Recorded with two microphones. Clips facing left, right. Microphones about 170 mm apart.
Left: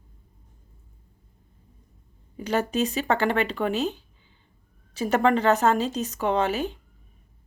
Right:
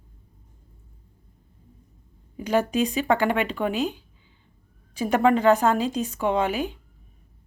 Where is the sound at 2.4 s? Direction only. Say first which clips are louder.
Right 2 dB; 10° right (ahead or behind).